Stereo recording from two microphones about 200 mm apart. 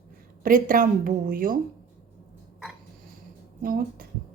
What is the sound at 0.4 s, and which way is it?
A woman's voice, 45° right (ahead or behind).